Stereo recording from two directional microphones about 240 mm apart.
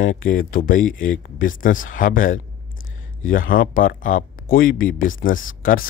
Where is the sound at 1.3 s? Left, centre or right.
Left.